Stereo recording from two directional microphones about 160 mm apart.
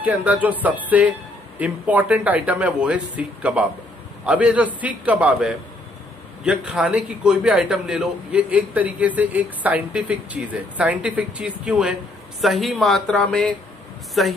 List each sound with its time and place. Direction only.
0.0 s a man's voice: 10° right (ahead or behind)